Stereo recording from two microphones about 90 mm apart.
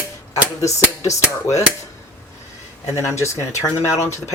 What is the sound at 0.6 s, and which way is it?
Speech, 35° left (ahead or behind).